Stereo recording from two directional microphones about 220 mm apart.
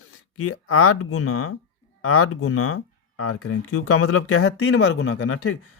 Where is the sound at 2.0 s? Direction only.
75° left (ahead or behind).